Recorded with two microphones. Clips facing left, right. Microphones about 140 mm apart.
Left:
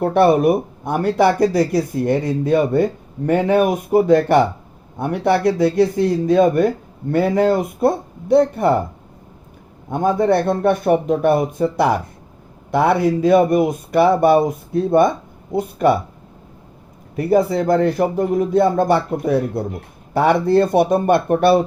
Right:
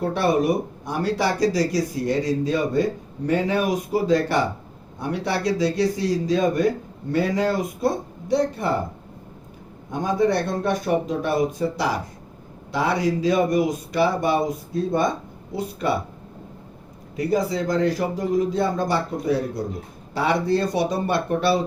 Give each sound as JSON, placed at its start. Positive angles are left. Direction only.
{"t": 0.0, "sound": "speech", "side_deg": 55}
{"t": 9.9, "sound": "speech", "side_deg": 55}
{"t": 17.2, "sound": "speech", "side_deg": 55}